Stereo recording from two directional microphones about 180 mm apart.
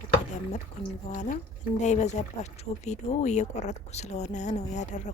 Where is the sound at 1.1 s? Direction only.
40° left (ahead or behind).